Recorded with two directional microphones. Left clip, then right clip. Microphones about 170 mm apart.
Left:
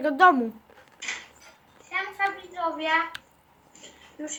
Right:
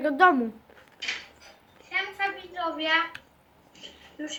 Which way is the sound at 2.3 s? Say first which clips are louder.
Left 2 dB; 35° left (ahead or behind).